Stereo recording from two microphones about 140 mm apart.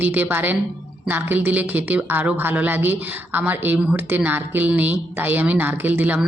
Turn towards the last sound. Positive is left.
turn(degrees=-10)  # may be behind; listen again after turning